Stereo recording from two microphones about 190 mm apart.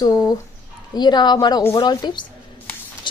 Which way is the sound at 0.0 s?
20° left (ahead or behind).